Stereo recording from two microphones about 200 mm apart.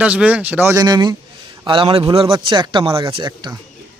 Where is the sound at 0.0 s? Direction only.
5° right (ahead or behind); by 3.6 s 20° right (ahead or behind).